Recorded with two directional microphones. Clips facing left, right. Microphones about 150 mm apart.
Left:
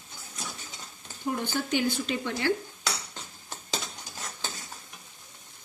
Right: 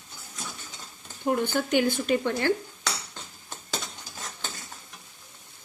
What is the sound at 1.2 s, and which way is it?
Stir, 55° right (ahead or behind).